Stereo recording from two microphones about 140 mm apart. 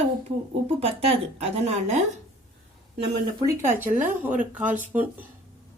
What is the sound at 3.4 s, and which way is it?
Speech, 15° right (ahead or behind).